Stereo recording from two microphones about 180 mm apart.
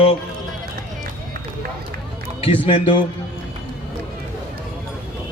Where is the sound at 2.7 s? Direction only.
25° left (ahead or behind).